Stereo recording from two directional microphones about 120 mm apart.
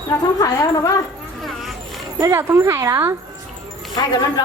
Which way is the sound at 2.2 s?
20° right (ahead or behind).